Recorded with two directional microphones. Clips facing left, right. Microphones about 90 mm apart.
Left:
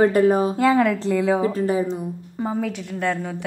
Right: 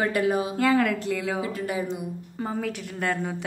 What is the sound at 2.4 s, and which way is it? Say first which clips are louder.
Speech: left 5 dB; 10° left (ahead or behind).